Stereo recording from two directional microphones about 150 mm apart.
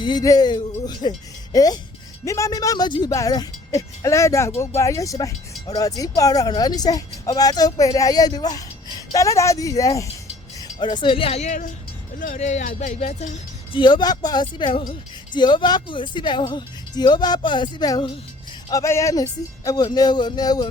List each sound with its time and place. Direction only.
0.0 s speech: 25° left (ahead or behind); by 13.3 s 50° left (ahead or behind)
13.7 s speech: 30° left (ahead or behind)